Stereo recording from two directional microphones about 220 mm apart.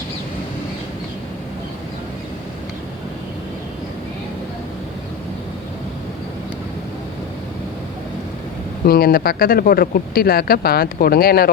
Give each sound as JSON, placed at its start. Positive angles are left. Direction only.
{"t": 8.9, "sound": "speech", "side_deg": 45}